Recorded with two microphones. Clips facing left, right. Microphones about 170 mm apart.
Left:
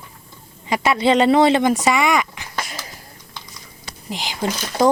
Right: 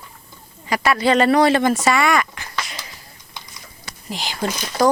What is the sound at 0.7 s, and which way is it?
Speech, 20° left (ahead or behind).